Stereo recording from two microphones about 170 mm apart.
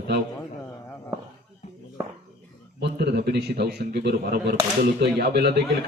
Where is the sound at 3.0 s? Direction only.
75° right (ahead or behind).